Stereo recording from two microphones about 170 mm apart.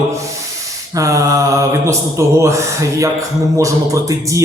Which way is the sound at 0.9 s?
20° right (ahead or behind).